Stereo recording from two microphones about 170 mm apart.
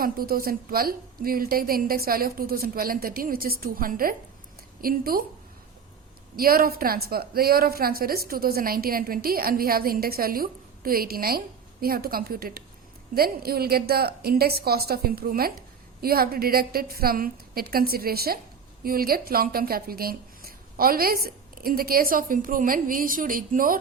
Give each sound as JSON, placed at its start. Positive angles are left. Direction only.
{"t": 0.0, "sound": "a woman's voice", "side_deg": -60}
{"t": 6.3, "sound": "a woman's voice", "side_deg": -60}